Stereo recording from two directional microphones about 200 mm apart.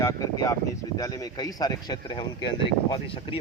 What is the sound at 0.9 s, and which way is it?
A man's voice, 20° left (ahead or behind).